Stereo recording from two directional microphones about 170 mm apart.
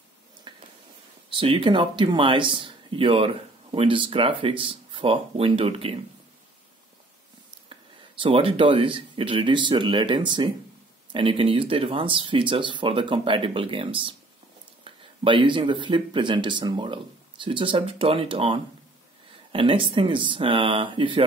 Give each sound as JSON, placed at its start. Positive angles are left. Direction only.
{"t": 0.4, "sound": "a sound", "side_deg": -25}
{"t": 1.3, "sound": "speech", "side_deg": -30}
{"t": 7.7, "sound": "speech", "side_deg": -30}